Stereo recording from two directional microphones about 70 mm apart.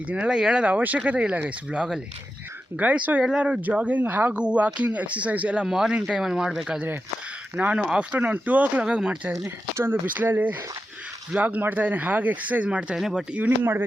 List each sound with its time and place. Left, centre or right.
0.1 s speech: centre
5.6 s speech: centre
7.5 s speech: centre
9.4 s speech: right; by 13.0 s centre
13.0 s speech: centre